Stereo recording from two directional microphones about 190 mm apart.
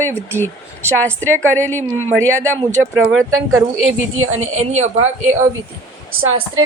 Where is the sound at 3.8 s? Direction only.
90° right.